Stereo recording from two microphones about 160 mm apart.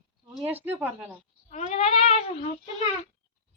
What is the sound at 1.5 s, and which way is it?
Speech, 45° left (ahead or behind).